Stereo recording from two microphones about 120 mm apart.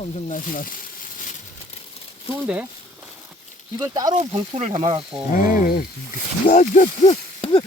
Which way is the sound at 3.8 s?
30° right (ahead or behind).